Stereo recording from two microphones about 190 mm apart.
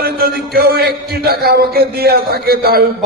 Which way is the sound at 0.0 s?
55° right (ahead or behind).